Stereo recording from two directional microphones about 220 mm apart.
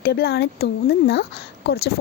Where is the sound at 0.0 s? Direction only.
45° left (ahead or behind).